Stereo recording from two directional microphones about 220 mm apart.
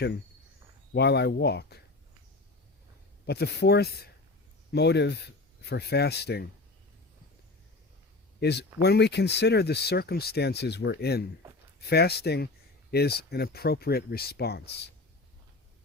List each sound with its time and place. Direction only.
0.9 s speech: 50° left (ahead or behind)
3.2 s speech: 50° left (ahead or behind)
8.4 s speech: 50° left (ahead or behind)